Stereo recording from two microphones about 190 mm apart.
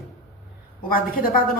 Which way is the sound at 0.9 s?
50° left (ahead or behind).